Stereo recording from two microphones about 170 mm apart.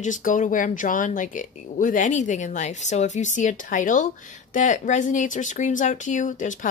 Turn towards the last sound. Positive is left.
turn(degrees=50)  # may be behind; listen again after turning